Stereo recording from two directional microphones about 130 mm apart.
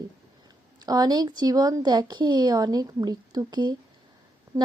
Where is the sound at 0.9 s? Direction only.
30° right (ahead or behind).